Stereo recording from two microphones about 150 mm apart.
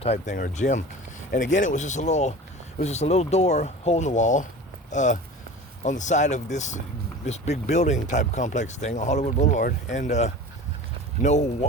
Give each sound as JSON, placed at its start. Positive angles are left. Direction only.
{"t": 0.0, "sound": "speech", "side_deg": 45}
{"t": 0.3, "sound": "speech", "side_deg": 60}